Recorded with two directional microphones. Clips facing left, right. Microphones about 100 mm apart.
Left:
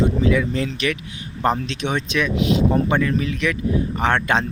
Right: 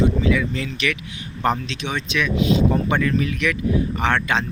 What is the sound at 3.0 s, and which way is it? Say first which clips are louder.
Speech: even; 25° left (ahead or behind).